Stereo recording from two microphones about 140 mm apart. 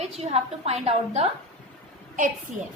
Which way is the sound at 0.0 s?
50° right (ahead or behind).